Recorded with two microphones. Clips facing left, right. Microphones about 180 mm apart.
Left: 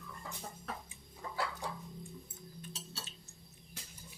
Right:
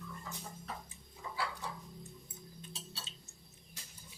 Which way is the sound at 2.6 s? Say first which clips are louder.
Left 2 dB; 25° right (ahead or behind).